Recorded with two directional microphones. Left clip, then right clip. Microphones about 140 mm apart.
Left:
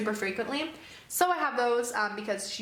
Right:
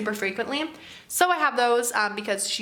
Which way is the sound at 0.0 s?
20° right (ahead or behind).